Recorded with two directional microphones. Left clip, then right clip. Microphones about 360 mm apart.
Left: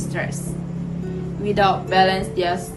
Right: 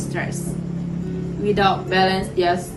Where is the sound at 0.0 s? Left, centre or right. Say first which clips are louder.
Even; centre.